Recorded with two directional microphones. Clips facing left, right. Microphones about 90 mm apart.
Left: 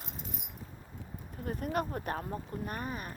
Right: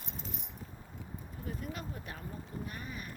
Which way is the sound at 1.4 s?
55° left (ahead or behind).